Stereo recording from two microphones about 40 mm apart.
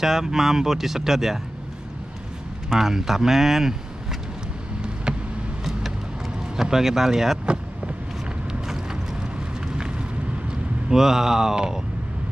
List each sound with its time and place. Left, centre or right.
0.0 s speech: centre
2.7 s speech: centre
5.7 s music: centre
6.5 s speech: centre
9.8 s vehicle: right
10.9 s speech: centre